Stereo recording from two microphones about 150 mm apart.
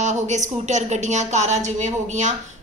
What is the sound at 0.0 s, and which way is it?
A woman's voice, 50° right (ahead or behind).